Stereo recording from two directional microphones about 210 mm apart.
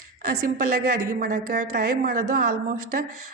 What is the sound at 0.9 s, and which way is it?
A woman's voice, 40° right (ahead or behind).